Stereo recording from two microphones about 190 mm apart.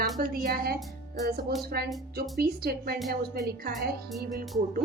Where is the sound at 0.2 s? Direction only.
50° right (ahead or behind).